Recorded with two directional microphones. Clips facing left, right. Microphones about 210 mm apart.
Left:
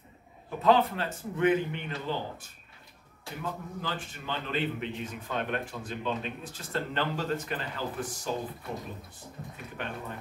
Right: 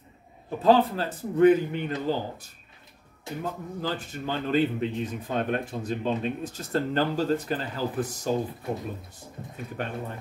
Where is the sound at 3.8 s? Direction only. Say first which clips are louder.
Right 6 dB; 40° right (ahead or behind).